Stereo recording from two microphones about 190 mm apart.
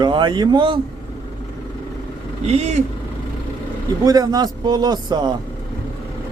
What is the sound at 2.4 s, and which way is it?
Speech, 35° right (ahead or behind).